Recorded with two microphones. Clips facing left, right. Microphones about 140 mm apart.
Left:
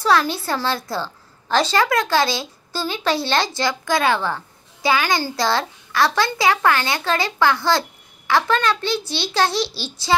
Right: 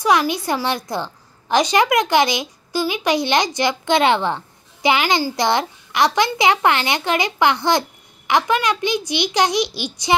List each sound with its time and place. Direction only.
0.0 s a woman's voice: 15° right (ahead or behind)